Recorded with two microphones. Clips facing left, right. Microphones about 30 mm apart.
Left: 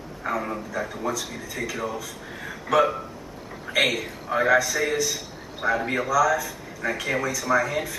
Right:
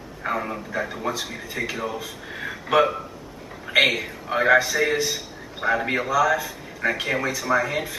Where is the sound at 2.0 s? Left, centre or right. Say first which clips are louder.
Right 3 dB; right.